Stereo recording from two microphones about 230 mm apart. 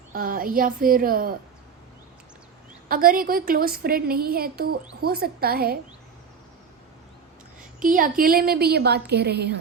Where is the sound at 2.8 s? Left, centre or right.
Right.